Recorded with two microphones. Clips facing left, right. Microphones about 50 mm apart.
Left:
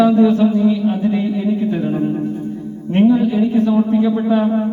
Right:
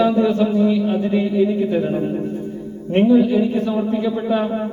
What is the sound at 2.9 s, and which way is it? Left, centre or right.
Speech, centre.